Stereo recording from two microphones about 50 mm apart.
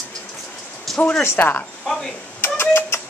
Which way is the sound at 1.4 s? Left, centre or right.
Left.